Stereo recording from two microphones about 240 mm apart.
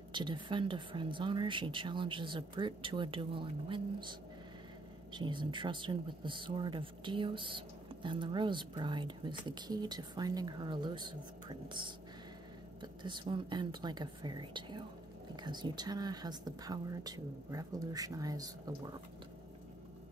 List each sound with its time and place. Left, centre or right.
0.1 s speech: centre